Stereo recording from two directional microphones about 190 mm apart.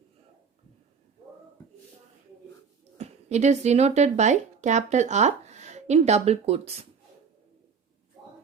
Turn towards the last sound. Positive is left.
turn(degrees=-30)  # may be behind; listen again after turning